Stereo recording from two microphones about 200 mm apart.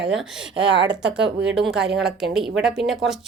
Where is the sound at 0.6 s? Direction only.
60° right (ahead or behind).